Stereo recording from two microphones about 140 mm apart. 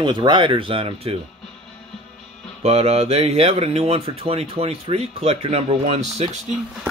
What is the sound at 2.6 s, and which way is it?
Speech, 45° right (ahead or behind).